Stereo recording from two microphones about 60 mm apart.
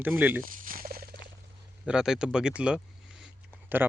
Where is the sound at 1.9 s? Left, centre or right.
Centre.